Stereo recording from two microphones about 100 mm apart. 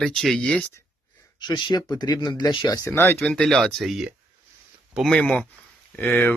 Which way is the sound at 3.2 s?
10° left (ahead or behind).